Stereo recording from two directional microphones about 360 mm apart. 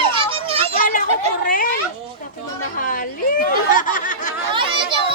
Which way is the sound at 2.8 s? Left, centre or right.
Left.